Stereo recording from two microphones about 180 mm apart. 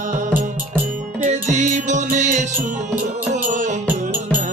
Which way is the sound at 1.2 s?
40° right (ahead or behind).